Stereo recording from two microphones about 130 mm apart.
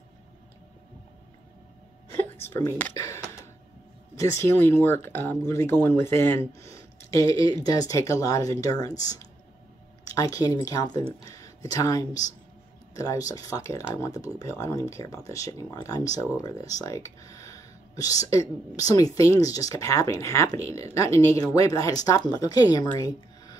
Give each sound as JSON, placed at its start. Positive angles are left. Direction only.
{"t": 2.3, "sound": "speech", "side_deg": 20}
{"t": 10.0, "sound": "speech", "side_deg": 25}
{"t": 22.9, "sound": "a sound", "side_deg": 30}